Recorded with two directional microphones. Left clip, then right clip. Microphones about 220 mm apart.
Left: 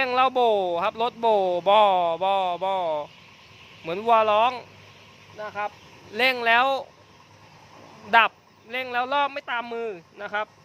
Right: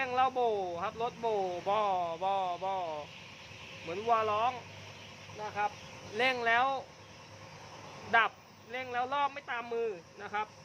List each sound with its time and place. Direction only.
0.0 s speech: 55° left (ahead or behind)
6.1 s speech: 45° left (ahead or behind)
8.1 s speech: 50° left (ahead or behind)